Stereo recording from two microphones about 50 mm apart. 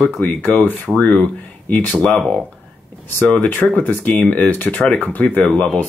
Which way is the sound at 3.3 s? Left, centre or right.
Left.